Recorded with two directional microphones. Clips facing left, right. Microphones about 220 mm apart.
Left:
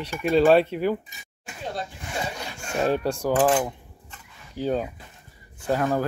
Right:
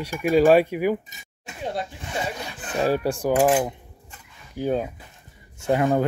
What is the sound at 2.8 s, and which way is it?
Speech, 10° right (ahead or behind).